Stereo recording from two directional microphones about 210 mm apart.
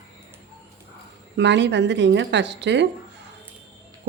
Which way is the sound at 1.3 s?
55° right (ahead or behind).